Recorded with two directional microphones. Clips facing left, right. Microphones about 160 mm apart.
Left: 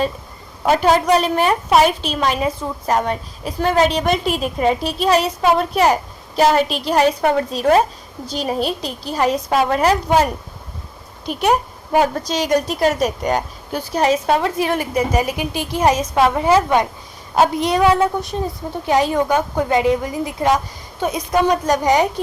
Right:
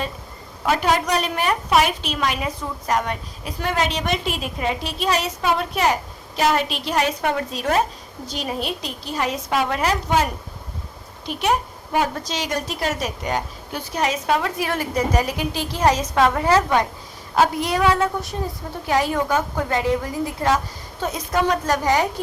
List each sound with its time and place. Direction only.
0.6 s a woman's voice: 35° left (ahead or behind)
11.3 s a woman's voice: 45° left (ahead or behind)
14.7 s a woman's voice: 15° left (ahead or behind)